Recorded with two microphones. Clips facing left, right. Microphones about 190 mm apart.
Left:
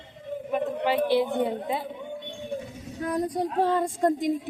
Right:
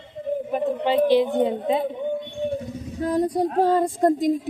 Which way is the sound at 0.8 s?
20° right (ahead or behind).